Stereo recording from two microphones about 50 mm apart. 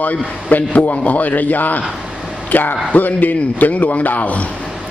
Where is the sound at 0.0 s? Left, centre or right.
Left.